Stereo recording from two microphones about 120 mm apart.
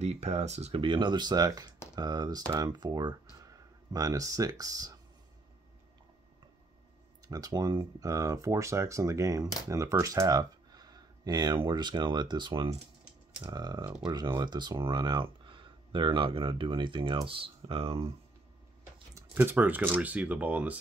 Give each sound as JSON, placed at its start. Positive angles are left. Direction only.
{"t": 0.0, "sound": "speech", "side_deg": -65}
{"t": 0.7, "sound": "speech", "side_deg": -40}
{"t": 7.2, "sound": "speech", "side_deg": -30}
{"t": 19.3, "sound": "speech", "side_deg": -15}